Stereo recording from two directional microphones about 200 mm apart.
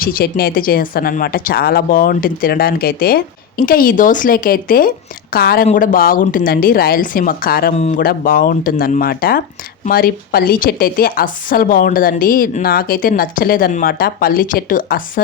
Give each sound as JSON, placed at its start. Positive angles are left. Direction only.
{"t": 0.0, "sound": "a woman's voice", "side_deg": 50}
{"t": 7.8, "sound": "speech", "side_deg": 35}
{"t": 8.0, "sound": "a woman's voice", "side_deg": 45}